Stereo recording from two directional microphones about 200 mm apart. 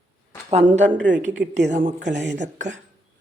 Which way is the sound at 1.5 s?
35° right (ahead or behind).